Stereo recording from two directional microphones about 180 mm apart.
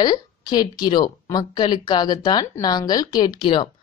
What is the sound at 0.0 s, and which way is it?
Speech, 20° left (ahead or behind).